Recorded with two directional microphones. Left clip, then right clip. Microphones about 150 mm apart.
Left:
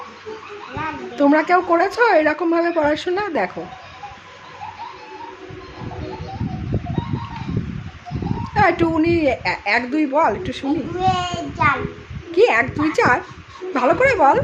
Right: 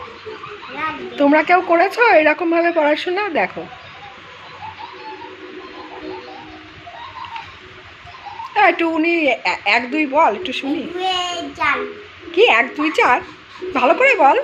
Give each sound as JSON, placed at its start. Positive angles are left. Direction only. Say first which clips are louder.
{"t": 1.1, "sound": "a woman's voice", "louder": "right 2 dB", "side_deg": 15}
{"t": 8.5, "sound": "a woman's voice", "louder": "right 2 dB", "side_deg": 20}
{"t": 11.0, "sound": "a woman's voice", "louder": "left 1 dB", "side_deg": 10}